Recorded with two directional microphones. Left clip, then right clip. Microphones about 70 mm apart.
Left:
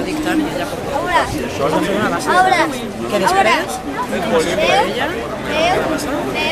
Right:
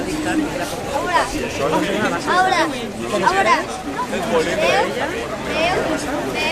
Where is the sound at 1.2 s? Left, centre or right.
Left.